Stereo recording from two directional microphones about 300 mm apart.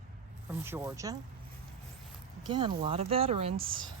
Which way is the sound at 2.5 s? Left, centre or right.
Centre.